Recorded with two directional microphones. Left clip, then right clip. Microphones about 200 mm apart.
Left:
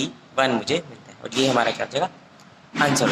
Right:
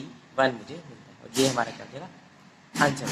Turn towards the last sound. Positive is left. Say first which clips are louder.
# left 5 dB
turn(degrees=40)  # may be behind; listen again after turning